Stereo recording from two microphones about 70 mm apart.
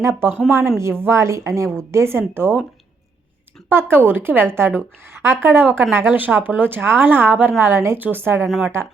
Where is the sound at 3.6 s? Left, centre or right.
Right.